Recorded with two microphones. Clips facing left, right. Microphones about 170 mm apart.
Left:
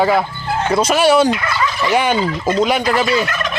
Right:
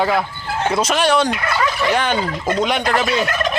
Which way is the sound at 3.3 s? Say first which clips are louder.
Right 2 dB; 40° right (ahead or behind).